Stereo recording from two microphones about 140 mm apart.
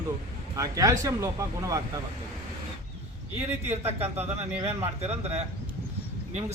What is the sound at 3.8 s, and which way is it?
Speech, 50° right (ahead or behind).